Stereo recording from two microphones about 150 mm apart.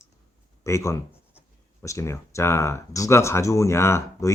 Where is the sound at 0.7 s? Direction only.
20° left (ahead or behind).